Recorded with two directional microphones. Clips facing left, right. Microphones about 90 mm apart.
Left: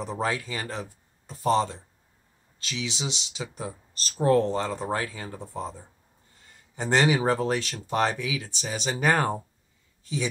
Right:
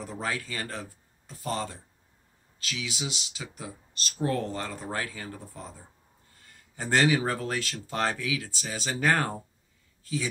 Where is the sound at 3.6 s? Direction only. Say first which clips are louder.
Left 4 dB; 35° left (ahead or behind).